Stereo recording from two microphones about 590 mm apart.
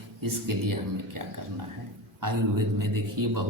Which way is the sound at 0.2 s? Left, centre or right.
Right.